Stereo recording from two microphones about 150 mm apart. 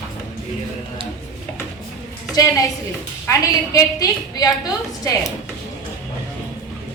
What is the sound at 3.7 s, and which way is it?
Speech, 25° left (ahead or behind).